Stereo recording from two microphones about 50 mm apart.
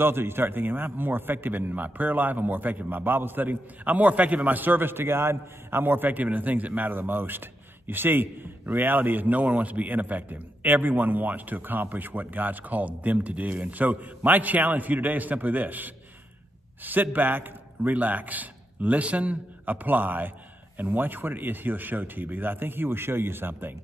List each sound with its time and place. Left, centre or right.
0.0 s a man's voice: right